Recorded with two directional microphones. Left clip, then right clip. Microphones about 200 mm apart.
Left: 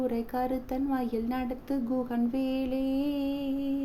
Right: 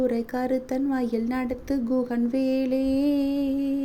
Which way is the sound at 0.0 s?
15° right (ahead or behind).